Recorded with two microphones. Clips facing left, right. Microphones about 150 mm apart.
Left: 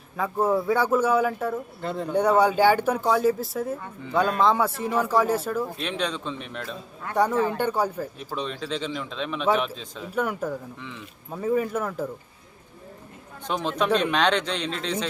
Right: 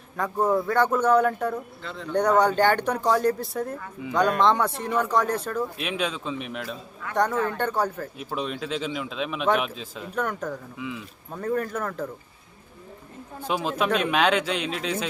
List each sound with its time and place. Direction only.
0.2 s a man's voice: 5° left (ahead or behind)
1.8 s speech: 50° left (ahead or behind)
2.1 s a man's voice: 10° left (ahead or behind)
5.7 s a man's voice: 5° right (ahead or behind)
7.4 s speech: 10° left (ahead or behind)
8.4 s a man's voice: 5° right (ahead or behind)
10.2 s speech: 5° left (ahead or behind)
10.8 s a man's voice: 5° right (ahead or behind)
11.3 s a man's voice: 5° left (ahead or behind)
13.4 s speech: 5° right (ahead or behind)